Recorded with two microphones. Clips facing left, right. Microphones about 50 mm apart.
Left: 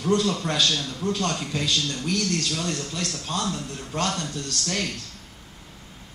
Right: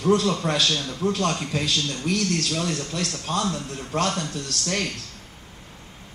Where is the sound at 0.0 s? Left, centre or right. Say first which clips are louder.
Right 2 dB; centre.